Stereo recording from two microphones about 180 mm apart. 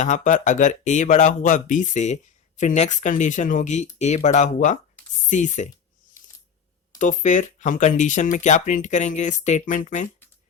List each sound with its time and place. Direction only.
0.0 s speech: 45° left (ahead or behind)
7.0 s speech: 45° left (ahead or behind)